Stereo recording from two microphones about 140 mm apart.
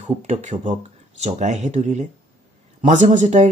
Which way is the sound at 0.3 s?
55° right (ahead or behind).